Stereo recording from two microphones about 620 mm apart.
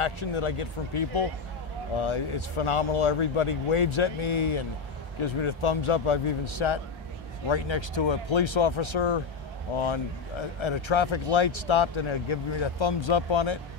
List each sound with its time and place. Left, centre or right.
0.0 s speech: left
10.6 s speech: left